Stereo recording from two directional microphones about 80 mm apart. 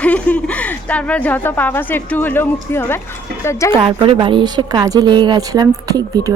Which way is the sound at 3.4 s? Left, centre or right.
Left.